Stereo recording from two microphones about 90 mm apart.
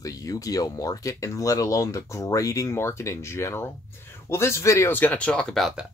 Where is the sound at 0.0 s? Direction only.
40° left (ahead or behind); by 5.9 s centre (ahead or behind).